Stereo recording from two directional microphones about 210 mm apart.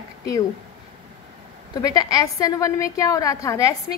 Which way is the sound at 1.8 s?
15° left (ahead or behind).